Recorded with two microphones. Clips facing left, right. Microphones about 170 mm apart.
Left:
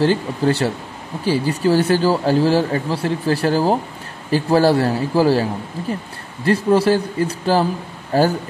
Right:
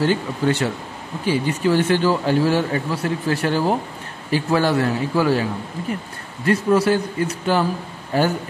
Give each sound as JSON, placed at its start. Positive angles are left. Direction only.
{"t": 0.0, "sound": "speech", "side_deg": 35}